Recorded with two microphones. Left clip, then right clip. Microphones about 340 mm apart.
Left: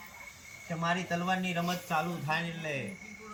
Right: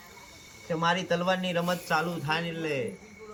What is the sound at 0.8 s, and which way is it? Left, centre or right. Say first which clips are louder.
Speech: right 5 dB; centre.